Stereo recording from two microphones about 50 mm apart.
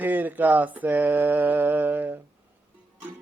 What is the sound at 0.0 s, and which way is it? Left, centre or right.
Mantra, right.